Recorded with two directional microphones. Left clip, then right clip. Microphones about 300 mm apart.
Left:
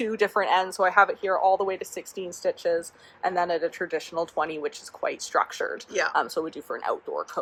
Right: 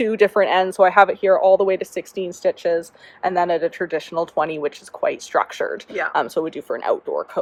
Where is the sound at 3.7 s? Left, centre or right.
Right.